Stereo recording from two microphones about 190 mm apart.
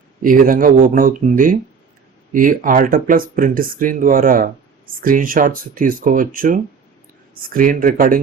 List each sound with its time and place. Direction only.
0.2 s speech: 45° right (ahead or behind)